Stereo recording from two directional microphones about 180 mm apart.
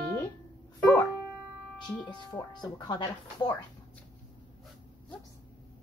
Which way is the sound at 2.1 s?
25° left (ahead or behind).